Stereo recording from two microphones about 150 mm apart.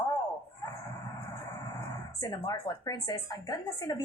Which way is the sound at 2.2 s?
25° left (ahead or behind).